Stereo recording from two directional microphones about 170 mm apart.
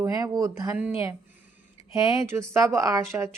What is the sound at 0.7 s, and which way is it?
Speech, 5° right (ahead or behind).